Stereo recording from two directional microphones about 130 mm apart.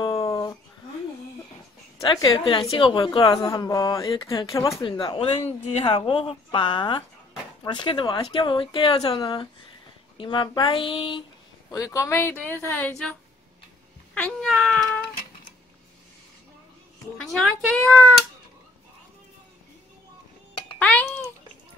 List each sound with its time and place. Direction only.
0.0 s a sound: 25° left (ahead or behind)
2.0 s a woman's voice: 25° left (ahead or behind)
2.3 s speech: 40° left (ahead or behind)
3.3 s speech: 30° left (ahead or behind)
5.3 s a woman's voice: 55° left (ahead or behind)
11.7 s a woman's voice: 25° left (ahead or behind)
14.2 s speech: 5° left (ahead or behind)
17.2 s speech: 5° left (ahead or behind)